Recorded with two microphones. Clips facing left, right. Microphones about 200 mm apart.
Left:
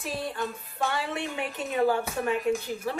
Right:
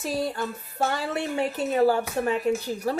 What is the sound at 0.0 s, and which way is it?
A woman's voice, 40° right (ahead or behind).